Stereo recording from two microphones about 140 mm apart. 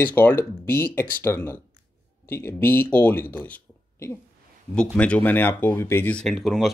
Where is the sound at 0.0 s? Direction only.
15° left (ahead or behind).